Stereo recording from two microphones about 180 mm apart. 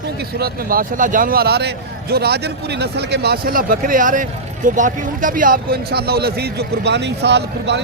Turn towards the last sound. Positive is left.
turn(degrees=-70)  # may be behind; listen again after turning